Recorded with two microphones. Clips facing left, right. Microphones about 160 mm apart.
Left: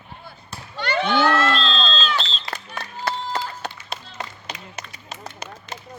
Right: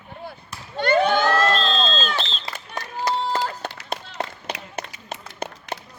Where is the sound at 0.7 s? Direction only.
45° right (ahead or behind).